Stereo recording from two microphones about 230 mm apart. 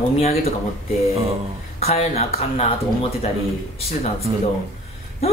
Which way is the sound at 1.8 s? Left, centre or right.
Left.